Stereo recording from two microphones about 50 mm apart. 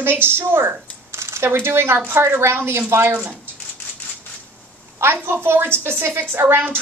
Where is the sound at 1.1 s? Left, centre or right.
Right.